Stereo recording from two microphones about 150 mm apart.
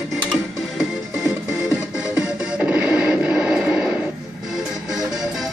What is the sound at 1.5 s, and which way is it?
Music, 15° right (ahead or behind).